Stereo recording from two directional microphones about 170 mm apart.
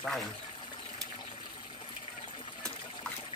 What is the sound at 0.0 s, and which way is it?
Speech, centre (ahead or behind).